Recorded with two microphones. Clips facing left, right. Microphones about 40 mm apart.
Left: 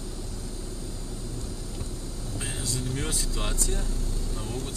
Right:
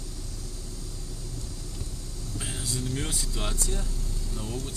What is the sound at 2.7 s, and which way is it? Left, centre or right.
Speech, centre.